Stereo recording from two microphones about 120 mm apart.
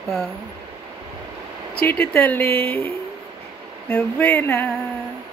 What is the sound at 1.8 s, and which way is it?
Speech, 15° left (ahead or behind).